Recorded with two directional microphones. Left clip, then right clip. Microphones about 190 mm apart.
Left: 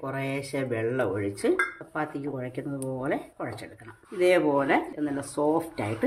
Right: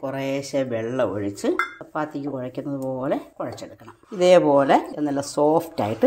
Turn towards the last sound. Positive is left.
turn(degrees=-30)  # may be behind; listen again after turning